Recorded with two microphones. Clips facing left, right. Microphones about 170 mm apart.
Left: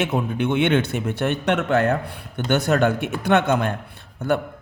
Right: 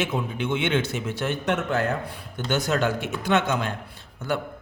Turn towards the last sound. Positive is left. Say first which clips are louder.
# left 6 dB
turn(degrees=55)  # may be behind; listen again after turning